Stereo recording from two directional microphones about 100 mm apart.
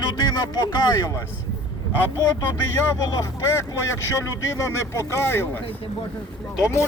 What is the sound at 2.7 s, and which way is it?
Speech, 25° left (ahead or behind).